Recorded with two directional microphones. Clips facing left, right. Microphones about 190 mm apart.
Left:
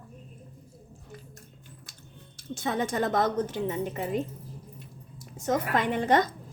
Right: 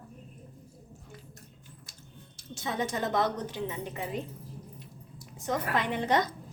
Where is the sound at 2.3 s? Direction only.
55° left (ahead or behind).